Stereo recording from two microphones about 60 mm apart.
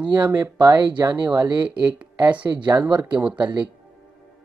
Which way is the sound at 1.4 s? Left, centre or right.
Right.